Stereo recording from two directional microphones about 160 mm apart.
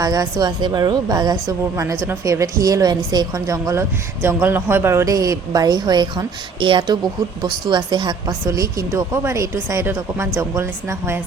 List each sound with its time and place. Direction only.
0.0 s a woman's voice: 20° right (ahead or behind)